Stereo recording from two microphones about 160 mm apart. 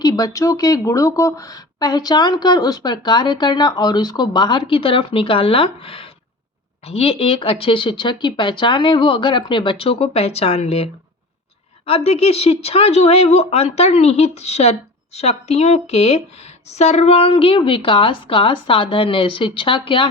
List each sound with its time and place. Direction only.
0.0 s speech: 25° left (ahead or behind); by 10.8 s 40° left (ahead or behind)
11.9 s speech: 40° left (ahead or behind)